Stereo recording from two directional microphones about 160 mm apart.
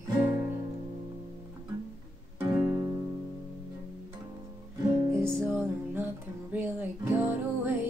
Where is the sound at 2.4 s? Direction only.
10° right (ahead or behind).